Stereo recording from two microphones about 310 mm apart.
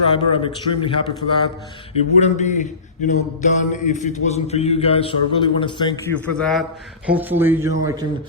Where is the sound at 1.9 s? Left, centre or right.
Left; by 8.1 s centre.